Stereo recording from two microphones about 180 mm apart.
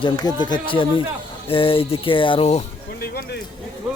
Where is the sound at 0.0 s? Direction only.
25° left (ahead or behind).